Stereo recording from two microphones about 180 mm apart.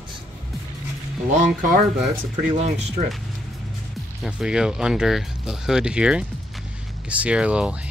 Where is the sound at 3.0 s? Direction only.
35° right (ahead or behind).